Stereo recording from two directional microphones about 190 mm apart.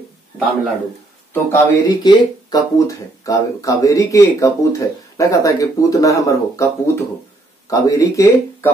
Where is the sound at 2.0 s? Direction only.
20° left (ahead or behind).